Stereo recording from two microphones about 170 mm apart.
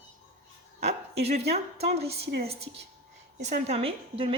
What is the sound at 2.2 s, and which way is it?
Speech, 70° right (ahead or behind).